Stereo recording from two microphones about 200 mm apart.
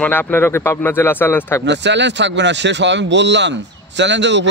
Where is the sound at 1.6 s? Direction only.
60° right (ahead or behind).